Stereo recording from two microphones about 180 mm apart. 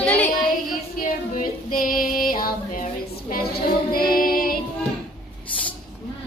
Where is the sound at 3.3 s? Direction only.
55° left (ahead or behind).